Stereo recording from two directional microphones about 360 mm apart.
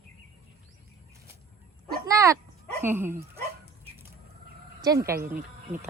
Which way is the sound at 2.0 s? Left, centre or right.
Centre.